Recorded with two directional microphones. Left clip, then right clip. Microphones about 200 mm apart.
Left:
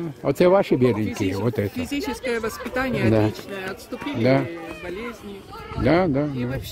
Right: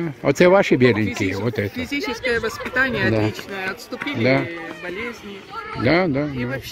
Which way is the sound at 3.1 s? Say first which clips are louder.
Even; 15° left (ahead or behind).